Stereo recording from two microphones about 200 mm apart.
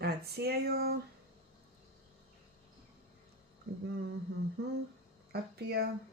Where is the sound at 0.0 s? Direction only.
50° right (ahead or behind).